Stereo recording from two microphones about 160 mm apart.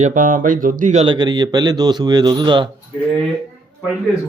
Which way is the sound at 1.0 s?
30° right (ahead or behind).